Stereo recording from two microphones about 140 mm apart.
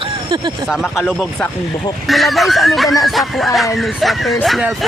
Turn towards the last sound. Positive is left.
turn(degrees=0)  # may be behind; listen again after turning